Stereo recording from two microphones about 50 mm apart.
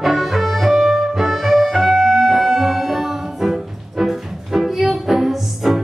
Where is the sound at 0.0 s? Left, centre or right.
Centre.